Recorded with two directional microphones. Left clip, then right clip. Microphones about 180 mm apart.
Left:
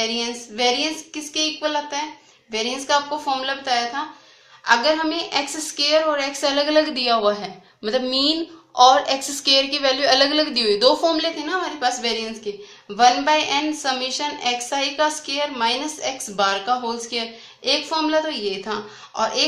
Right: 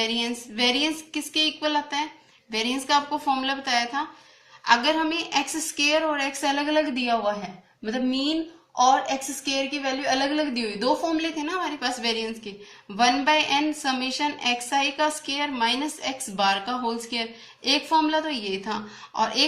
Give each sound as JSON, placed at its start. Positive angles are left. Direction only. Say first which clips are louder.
{"t": 0.0, "sound": "a woman's voice", "louder": "left 2 dB", "side_deg": 30}